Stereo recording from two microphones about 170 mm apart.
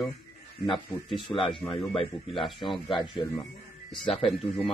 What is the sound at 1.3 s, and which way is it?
Speech, 30° left (ahead or behind).